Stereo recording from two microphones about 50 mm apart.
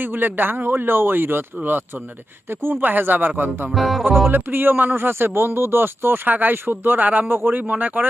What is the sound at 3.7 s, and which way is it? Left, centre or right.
Music, centre.